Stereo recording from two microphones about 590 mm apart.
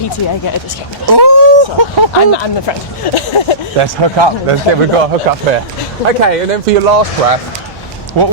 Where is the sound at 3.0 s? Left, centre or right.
Left.